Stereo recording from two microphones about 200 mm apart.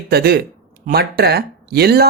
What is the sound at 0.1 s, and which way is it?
Speech, 50° right (ahead or behind).